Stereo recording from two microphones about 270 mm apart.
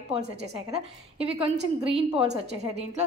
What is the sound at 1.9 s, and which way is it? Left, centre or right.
A woman's voice, right.